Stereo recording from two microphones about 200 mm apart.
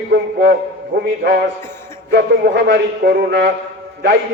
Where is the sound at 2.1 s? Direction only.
55° right (ahead or behind).